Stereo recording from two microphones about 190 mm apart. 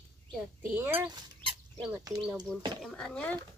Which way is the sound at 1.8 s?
15° right (ahead or behind).